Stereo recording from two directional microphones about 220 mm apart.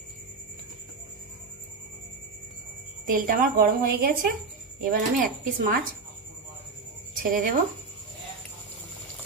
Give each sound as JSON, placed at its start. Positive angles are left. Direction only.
{"t": 3.1, "sound": "a woman's voice", "side_deg": -40}
{"t": 7.2, "sound": "a woman's voice", "side_deg": -40}